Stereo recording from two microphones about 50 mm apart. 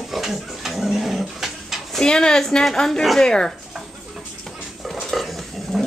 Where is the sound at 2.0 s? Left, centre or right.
Centre.